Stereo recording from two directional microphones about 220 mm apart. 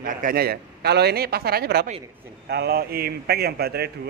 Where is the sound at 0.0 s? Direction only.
40° right (ahead or behind).